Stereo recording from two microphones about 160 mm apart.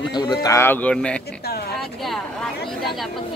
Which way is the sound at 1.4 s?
80° left.